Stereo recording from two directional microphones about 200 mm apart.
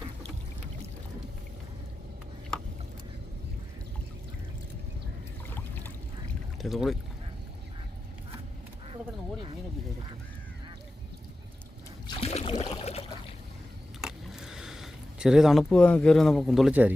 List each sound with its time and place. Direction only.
6.6 s speech: centre (ahead or behind)
12.0 s trickle: 30° left (ahead or behind)
14.0 s a sound: centre (ahead or behind)